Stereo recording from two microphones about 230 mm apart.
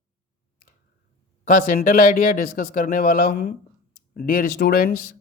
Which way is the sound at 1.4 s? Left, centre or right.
Left.